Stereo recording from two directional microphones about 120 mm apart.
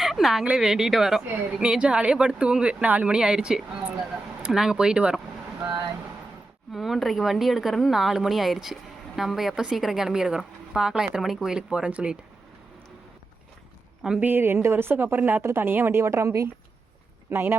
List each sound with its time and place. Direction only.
0.0 s a woman's voice: centre (ahead or behind)
6.7 s speech: centre (ahead or behind)
14.0 s a woman's voice: 10° right (ahead or behind)